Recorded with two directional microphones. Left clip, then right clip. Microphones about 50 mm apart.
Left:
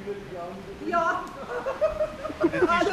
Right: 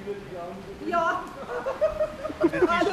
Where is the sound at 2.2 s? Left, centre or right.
Centre.